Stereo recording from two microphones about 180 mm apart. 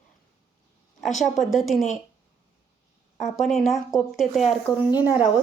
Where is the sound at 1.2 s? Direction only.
Centre (ahead or behind).